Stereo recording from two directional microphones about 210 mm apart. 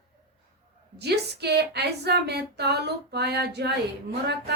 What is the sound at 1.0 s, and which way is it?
Speech, 50° right (ahead or behind).